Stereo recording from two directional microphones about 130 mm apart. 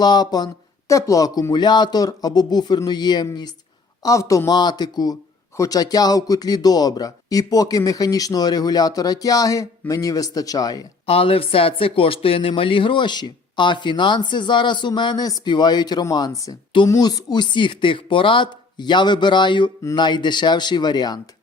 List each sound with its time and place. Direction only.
0.0 s speech: 30° left (ahead or behind)
11.0 s speech: 45° left (ahead or behind)